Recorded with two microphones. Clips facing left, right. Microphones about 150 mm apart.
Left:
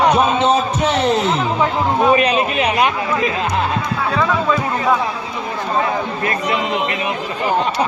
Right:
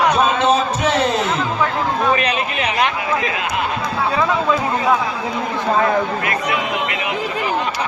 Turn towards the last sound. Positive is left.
turn(degrees=30)  # may be behind; listen again after turning